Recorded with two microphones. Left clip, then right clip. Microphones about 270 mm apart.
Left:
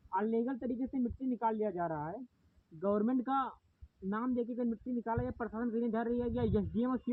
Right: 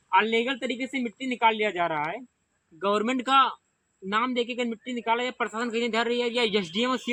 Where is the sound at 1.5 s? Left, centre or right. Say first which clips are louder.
Right 10 dB; centre.